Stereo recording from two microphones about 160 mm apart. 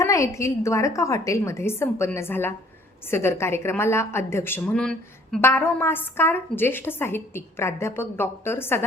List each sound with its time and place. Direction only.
0.0 s a woman's voice: 20° left (ahead or behind)